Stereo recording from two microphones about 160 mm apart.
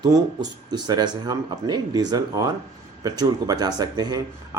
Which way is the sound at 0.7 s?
25° right (ahead or behind).